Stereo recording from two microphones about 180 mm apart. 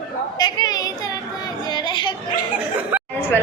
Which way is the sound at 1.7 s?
25° left (ahead or behind).